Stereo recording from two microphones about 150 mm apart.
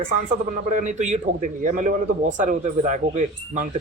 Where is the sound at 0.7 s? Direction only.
55° right (ahead or behind).